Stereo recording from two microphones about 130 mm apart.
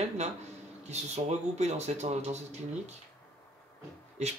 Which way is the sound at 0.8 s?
55° right (ahead or behind).